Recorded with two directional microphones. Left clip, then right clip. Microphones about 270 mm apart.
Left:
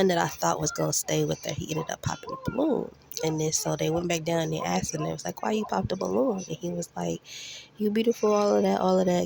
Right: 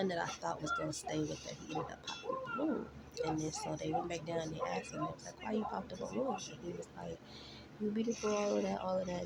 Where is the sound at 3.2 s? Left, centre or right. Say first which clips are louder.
Left 10 dB; left.